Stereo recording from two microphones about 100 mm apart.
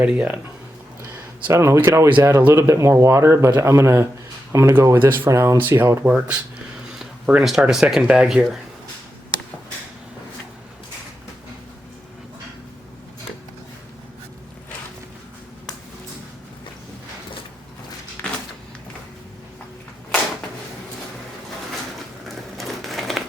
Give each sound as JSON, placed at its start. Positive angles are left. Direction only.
{"t": 0.0, "sound": "speech", "side_deg": -10}
{"t": 1.1, "sound": "speech", "side_deg": -25}
{"t": 5.3, "sound": "speech", "side_deg": -30}
{"t": 7.0, "sound": "speech", "side_deg": -5}
{"t": 18.2, "sound": "a sound", "side_deg": 20}
{"t": 22.5, "sound": "a sound", "side_deg": 0}